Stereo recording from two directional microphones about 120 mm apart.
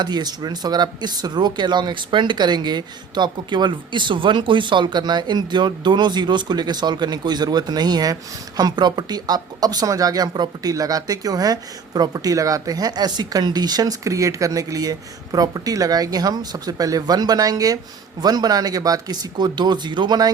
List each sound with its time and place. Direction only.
0.0 s speech: 35° right (ahead or behind)